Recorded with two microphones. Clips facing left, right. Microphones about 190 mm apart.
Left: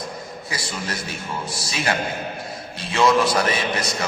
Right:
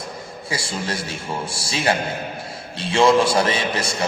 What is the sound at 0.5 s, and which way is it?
A man's voice, 30° right (ahead or behind).